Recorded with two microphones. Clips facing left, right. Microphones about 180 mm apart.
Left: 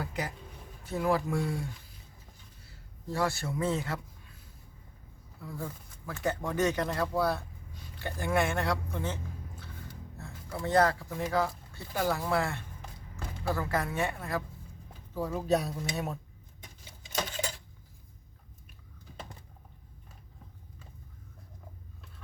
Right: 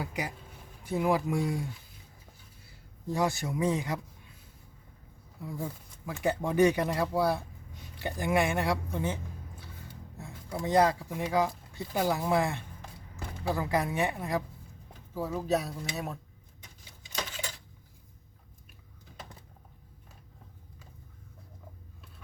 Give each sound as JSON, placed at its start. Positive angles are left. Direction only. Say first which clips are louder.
{"t": 0.0, "sound": "speech", "louder": "even", "side_deg": -15}
{"t": 3.1, "sound": "speech", "louder": "right 2 dB", "side_deg": -15}
{"t": 5.4, "sound": "speech", "louder": "right 2 dB", "side_deg": -15}
{"t": 10.2, "sound": "speech", "louder": "right 2 dB", "side_deg": -15}
{"t": 15.1, "sound": "speech", "louder": "left 1 dB", "side_deg": -5}